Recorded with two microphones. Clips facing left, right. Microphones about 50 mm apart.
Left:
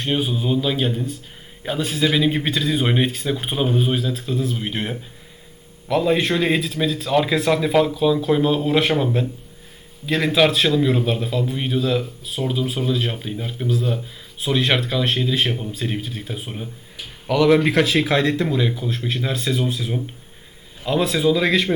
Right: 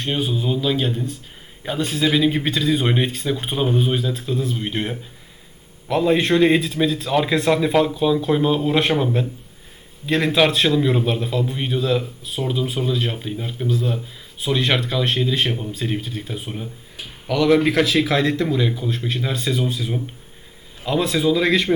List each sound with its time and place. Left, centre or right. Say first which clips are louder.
0.0 s a man's voice: left 1 dB; centre